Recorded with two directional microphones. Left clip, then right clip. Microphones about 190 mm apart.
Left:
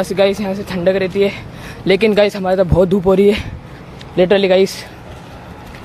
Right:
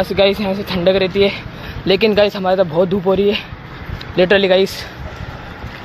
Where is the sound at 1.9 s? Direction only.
20° left (ahead or behind).